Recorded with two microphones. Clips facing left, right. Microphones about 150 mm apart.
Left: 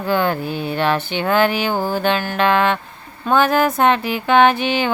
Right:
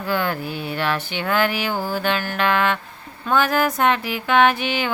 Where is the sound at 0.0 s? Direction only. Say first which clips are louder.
Left 4 dB; 25° left (ahead or behind).